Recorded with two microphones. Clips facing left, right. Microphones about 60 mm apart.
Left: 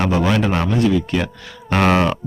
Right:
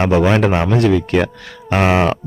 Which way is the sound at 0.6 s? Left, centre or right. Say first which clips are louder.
Right 3 dB; right.